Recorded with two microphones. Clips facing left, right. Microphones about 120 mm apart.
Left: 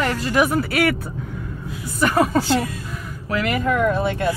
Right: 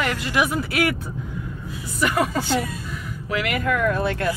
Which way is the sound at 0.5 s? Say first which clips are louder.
Left 3 dB; 55° left (ahead or behind).